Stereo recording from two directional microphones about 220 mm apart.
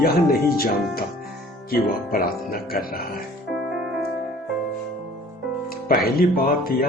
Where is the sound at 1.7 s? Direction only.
45° left (ahead or behind).